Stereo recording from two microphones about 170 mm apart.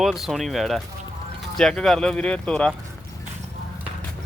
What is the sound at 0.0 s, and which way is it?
Speech, centre (ahead or behind).